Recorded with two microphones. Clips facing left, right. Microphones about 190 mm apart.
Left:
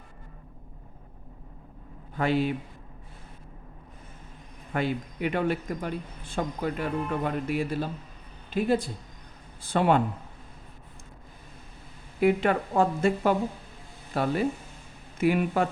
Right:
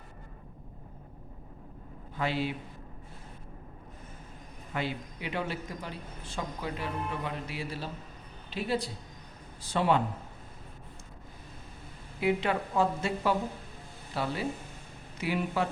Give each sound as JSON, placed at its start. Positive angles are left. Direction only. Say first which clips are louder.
{"t": 2.1, "sound": "a man's voice", "louder": "left 6 dB", "side_deg": 50}
{"t": 4.7, "sound": "a man's voice", "louder": "left 6 dB", "side_deg": 50}
{"t": 12.2, "sound": "a man's voice", "louder": "left 5 dB", "side_deg": 50}